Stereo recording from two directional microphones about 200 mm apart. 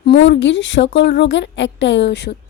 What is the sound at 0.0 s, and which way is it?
A woman's voice, 60° left (ahead or behind).